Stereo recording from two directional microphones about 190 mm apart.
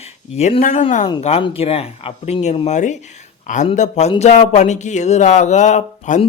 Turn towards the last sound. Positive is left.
turn(degrees=40)  # may be behind; listen again after turning